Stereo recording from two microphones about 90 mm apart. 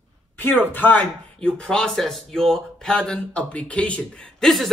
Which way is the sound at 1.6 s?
10° left (ahead or behind).